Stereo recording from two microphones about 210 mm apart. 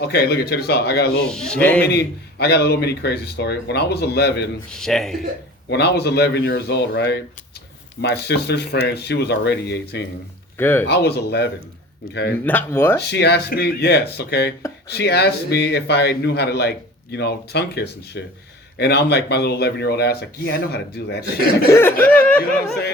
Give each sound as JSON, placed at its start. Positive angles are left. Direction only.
{"t": 0.0, "sound": "a man's voice", "side_deg": 50}
{"t": 1.2, "sound": "speech", "side_deg": 5}
{"t": 1.8, "sound": "a man's voice", "side_deg": 50}
{"t": 4.7, "sound": "speech", "side_deg": 0}
{"t": 5.6, "sound": "a man's voice", "side_deg": 50}
{"t": 10.6, "sound": "speech", "side_deg": 10}
{"t": 10.8, "sound": "a man's voice", "side_deg": 50}
{"t": 12.5, "sound": "speech", "side_deg": 10}
{"t": 13.0, "sound": "a man's voice", "side_deg": 50}
{"t": 21.7, "sound": "speech", "side_deg": 10}